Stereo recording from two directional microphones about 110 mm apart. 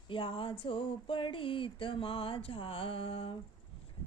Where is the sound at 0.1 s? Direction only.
55° left (ahead or behind).